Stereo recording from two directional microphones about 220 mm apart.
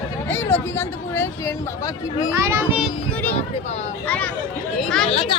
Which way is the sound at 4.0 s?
5° left (ahead or behind).